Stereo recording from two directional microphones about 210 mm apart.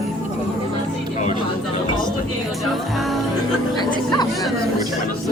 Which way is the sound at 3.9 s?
20° left (ahead or behind).